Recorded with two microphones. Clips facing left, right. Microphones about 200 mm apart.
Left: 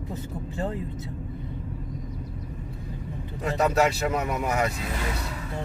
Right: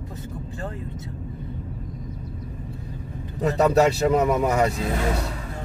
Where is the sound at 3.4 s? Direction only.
35° right (ahead or behind).